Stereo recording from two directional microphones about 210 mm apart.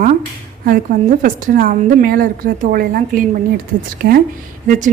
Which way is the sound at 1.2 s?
40° right (ahead or behind).